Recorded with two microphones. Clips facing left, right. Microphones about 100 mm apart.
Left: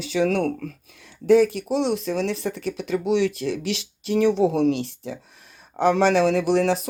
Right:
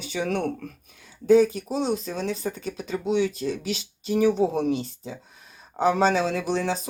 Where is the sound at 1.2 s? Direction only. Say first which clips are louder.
Left 1 dB; 90° left.